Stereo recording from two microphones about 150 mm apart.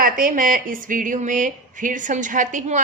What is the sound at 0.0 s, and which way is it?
Speech, 70° right (ahead or behind).